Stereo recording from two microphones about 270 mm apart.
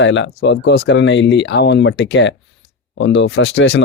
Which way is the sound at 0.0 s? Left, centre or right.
Left.